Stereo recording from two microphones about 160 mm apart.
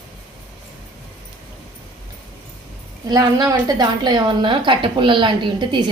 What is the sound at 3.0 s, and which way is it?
A woman's voice, 25° right (ahead or behind).